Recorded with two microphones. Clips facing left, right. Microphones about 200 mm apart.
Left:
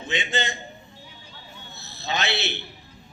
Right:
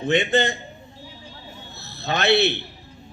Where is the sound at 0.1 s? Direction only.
60° right (ahead or behind).